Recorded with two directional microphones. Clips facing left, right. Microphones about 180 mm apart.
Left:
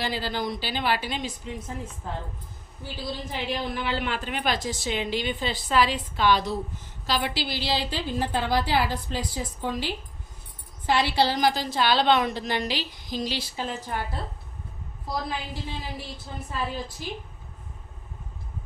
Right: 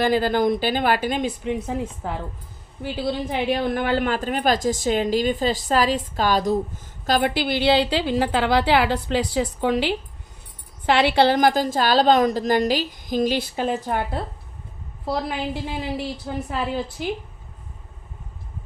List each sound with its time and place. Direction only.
0.0 s a woman's voice: 50° right (ahead or behind)
16.0 s a woman's voice: 80° right